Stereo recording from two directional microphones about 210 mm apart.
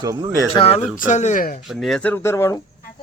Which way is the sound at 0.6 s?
30° left (ahead or behind).